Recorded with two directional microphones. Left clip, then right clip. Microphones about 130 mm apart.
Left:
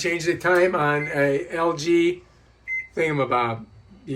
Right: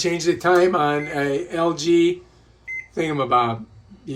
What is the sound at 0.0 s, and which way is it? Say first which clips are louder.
Speech: right 2 dB; 20° right (ahead or behind).